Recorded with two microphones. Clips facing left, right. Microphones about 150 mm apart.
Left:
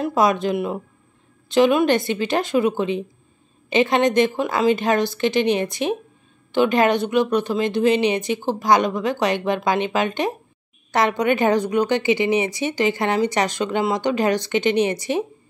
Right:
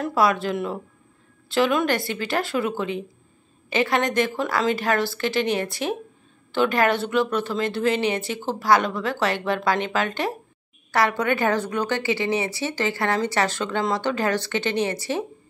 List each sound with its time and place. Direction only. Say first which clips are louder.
0.0 s a woman's voice: left 3 dB; 20° left (ahead or behind)